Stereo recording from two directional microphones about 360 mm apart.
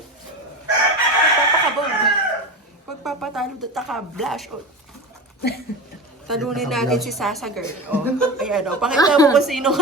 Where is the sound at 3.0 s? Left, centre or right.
Centre.